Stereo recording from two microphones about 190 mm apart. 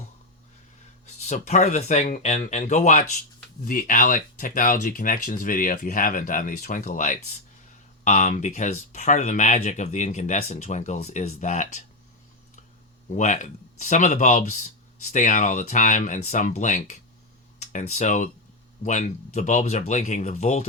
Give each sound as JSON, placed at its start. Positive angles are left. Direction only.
{"t": 1.0, "sound": "speech", "side_deg": 35}
{"t": 13.1, "sound": "speech", "side_deg": 40}